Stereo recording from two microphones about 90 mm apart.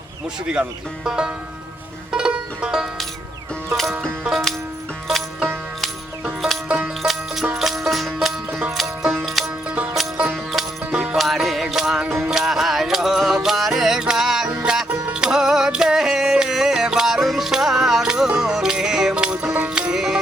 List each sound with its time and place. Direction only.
0.4 s speech: 10° right (ahead or behind)
2.1 s music: 10° right (ahead or behind)
5.8 s music: centre (ahead or behind)
9.6 s music: 15° right (ahead or behind)
9.9 s music: 5° right (ahead or behind)
10.9 s music: 15° right (ahead or behind)
11.2 s music: centre (ahead or behind)